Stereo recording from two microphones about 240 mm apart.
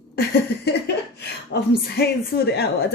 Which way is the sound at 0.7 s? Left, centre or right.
Left.